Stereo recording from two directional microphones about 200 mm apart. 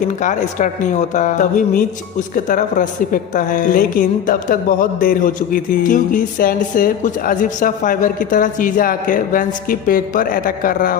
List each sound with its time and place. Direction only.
0.0 s a woman's voice: 40° left (ahead or behind)